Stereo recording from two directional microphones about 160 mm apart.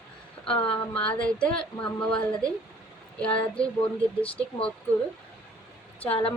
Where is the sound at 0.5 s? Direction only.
35° left (ahead or behind).